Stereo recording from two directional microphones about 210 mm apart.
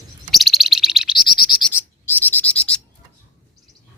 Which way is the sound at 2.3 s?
5° left (ahead or behind).